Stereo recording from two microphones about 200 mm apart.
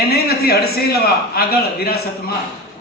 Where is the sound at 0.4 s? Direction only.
50° left (ahead or behind).